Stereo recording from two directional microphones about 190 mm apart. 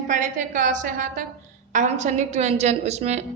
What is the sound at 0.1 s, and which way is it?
A woman's voice, 45° right (ahead or behind).